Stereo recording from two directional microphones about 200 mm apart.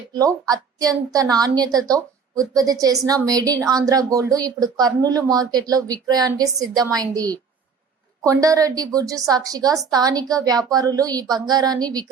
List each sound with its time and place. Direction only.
0.1 s a woman's voice: 20° right (ahead or behind)